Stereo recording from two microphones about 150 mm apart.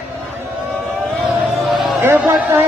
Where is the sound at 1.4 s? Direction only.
Centre (ahead or behind).